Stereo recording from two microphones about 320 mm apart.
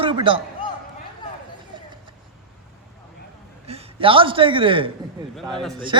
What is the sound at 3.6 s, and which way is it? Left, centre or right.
A man's voice, centre.